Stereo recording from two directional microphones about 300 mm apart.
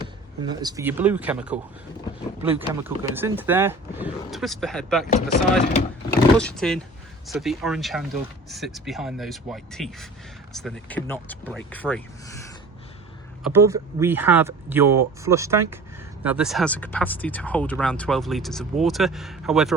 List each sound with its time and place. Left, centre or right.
0.0 s speech: centre
5.1 s speech: left
6.3 s speech: centre
13.4 s speech: centre